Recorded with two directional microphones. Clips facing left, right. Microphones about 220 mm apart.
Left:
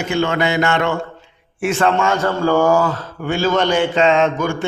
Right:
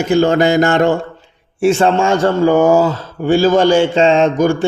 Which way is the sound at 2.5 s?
20° right (ahead or behind).